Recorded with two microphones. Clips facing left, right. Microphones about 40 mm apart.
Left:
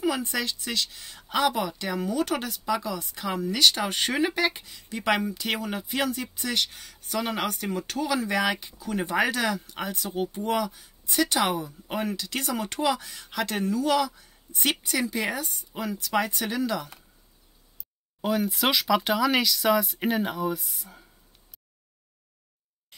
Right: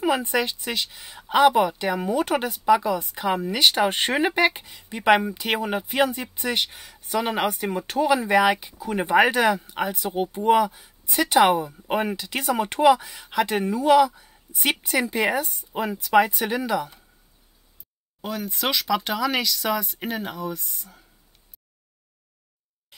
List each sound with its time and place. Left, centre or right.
0.0 s speech: right
4.5 s speech: right
18.2 s speech: centre